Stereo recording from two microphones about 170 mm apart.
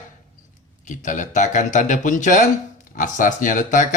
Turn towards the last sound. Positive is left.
turn(degrees=50)  # may be behind; listen again after turning